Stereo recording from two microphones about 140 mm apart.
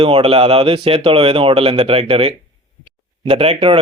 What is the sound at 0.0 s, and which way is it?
Speech, 40° right (ahead or behind).